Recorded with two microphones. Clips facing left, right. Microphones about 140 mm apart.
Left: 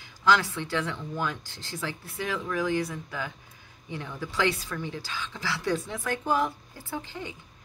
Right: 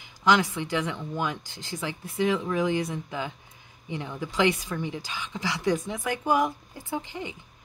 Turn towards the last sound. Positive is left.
turn(degrees=-15)  # may be behind; listen again after turning